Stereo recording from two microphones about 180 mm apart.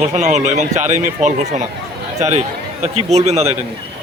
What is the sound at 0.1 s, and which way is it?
A man's voice, 40° right (ahead or behind).